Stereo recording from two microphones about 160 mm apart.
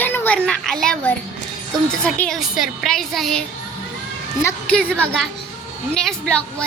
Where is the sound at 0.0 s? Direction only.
10° left (ahead or behind).